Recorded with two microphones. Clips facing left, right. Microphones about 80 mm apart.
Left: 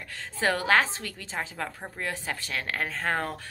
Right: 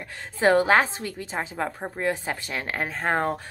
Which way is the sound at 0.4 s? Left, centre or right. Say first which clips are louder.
Right 5 dB; right.